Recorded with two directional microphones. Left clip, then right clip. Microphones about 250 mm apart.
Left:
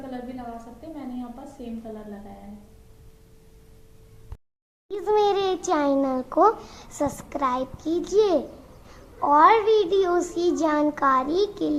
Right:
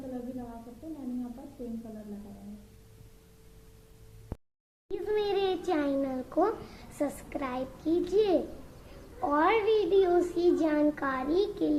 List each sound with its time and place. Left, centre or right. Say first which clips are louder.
4.9 s a child's voice: left 9 dB; centre